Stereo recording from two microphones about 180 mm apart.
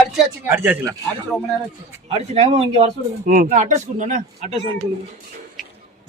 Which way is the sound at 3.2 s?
50° right (ahead or behind).